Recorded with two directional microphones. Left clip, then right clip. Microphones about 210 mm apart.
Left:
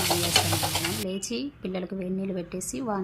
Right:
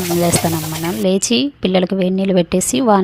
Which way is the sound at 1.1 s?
40° right (ahead or behind).